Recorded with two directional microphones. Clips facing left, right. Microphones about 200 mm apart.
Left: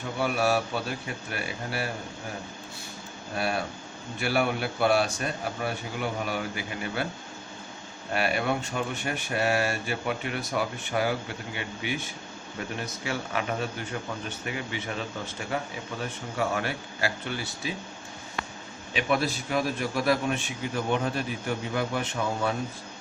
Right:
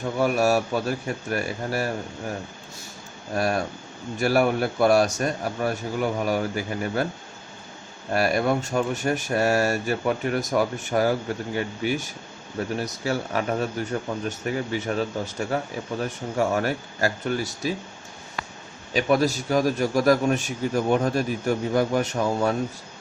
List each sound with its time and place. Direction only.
0.2 s a man's voice: 40° right (ahead or behind)
3.3 s a man's voice: 45° right (ahead or behind)
8.1 s a man's voice: 40° right (ahead or behind)
18.9 s speech: 40° right (ahead or behind)